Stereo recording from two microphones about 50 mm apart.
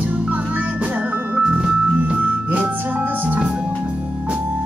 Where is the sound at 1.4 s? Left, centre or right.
Centre.